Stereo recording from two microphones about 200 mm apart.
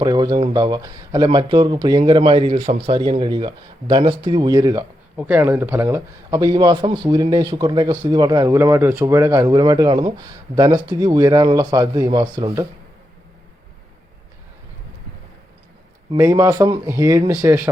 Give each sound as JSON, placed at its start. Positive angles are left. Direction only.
{"t": 0.0, "sound": "speech", "side_deg": -20}
{"t": 5.1, "sound": "a man's voice", "side_deg": -10}
{"t": 16.1, "sound": "a man's voice", "side_deg": -15}